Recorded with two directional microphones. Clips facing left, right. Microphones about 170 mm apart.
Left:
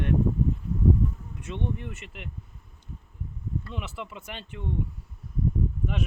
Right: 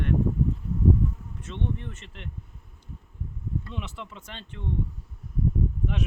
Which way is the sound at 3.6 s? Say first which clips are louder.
Left 1 dB; 5° left (ahead or behind).